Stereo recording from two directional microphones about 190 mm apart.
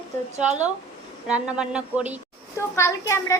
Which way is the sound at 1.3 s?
5° right (ahead or behind).